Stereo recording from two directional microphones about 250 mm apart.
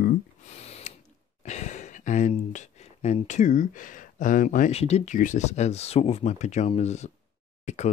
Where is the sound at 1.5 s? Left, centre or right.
Left.